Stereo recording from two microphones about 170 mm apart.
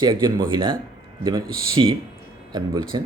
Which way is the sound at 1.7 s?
30° right (ahead or behind).